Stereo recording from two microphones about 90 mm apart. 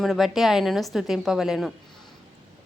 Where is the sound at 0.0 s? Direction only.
Centre (ahead or behind).